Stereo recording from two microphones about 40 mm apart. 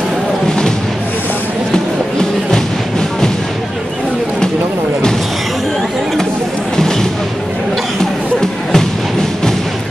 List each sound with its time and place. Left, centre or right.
1.7 s music: centre
8.0 s music: centre